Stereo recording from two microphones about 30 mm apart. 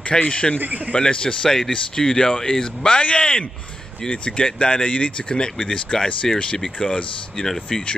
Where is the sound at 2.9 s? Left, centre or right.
Left.